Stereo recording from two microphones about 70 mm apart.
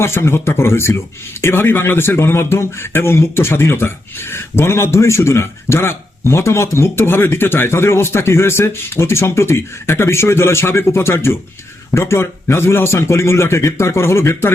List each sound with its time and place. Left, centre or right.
0.0 s speech: left